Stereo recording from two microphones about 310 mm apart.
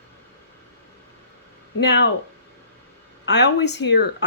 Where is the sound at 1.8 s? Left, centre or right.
Left.